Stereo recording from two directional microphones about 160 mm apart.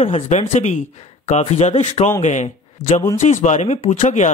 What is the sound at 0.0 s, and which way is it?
Speech, 40° left (ahead or behind).